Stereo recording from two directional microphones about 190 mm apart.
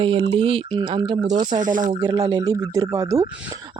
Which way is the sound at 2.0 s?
20° right (ahead or behind).